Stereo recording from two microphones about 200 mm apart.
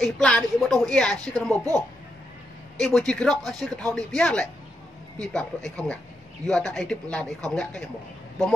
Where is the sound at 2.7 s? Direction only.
Centre (ahead or behind).